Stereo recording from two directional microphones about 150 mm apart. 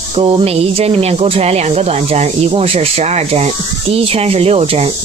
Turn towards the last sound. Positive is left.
turn(degrees=-40)  # may be behind; listen again after turning